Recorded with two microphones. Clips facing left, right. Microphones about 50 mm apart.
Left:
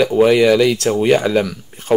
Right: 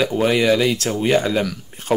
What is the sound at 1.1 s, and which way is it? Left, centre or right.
Speech, centre.